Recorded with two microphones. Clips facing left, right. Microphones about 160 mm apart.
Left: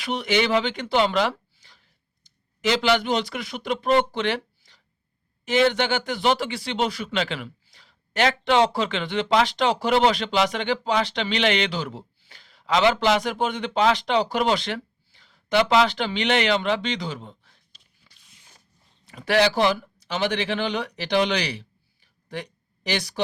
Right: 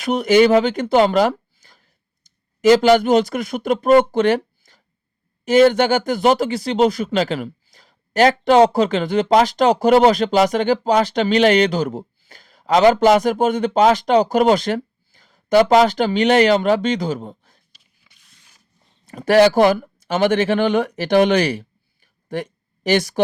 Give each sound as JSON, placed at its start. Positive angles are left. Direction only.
{"t": 0.0, "sound": "speech", "side_deg": -45}
{"t": 18.1, "sound": "walk", "side_deg": 0}
{"t": 19.0, "sound": "speech", "side_deg": -45}